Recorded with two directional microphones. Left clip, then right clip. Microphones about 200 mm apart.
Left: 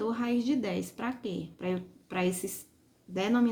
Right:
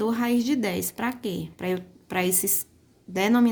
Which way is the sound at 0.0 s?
45° right (ahead or behind).